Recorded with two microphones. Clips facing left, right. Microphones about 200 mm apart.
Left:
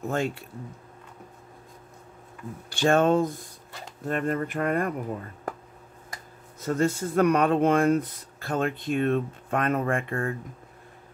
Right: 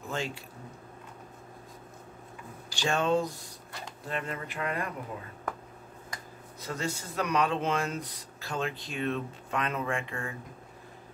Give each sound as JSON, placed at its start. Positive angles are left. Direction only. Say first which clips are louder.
{"t": 0.1, "sound": "speech", "louder": "left 6 dB", "side_deg": 55}
{"t": 2.7, "sound": "speech", "louder": "left 7 dB", "side_deg": 55}
{"t": 6.6, "sound": "speech", "louder": "left 10 dB", "side_deg": 50}